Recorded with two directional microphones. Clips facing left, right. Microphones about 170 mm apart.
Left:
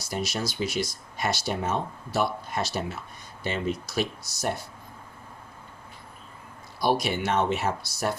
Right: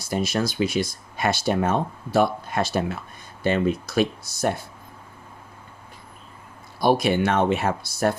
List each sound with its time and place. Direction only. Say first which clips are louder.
0.0 s speech: right 6 dB; 55° right (ahead or behind)
6.7 s speech: right 6 dB; 55° right (ahead or behind)